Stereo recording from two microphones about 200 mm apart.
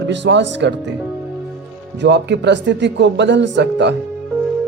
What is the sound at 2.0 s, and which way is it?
A man's voice, 60° right (ahead or behind).